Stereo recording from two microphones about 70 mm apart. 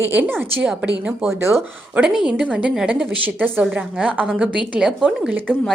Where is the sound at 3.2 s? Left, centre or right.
Right.